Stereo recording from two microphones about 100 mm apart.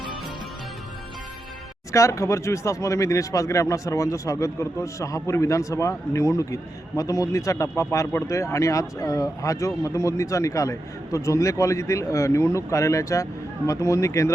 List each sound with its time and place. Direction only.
1.9 s speech: 30° left (ahead or behind)